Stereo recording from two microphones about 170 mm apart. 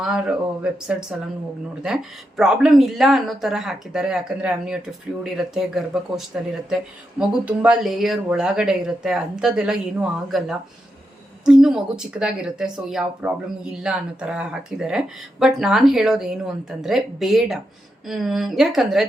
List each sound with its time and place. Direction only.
0.0 s speech: 5° right (ahead or behind)
2.4 s speech: 5° right (ahead or behind)